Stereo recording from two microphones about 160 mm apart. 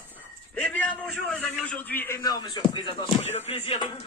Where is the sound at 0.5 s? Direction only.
10° left (ahead or behind); by 3.1 s 30° left (ahead or behind).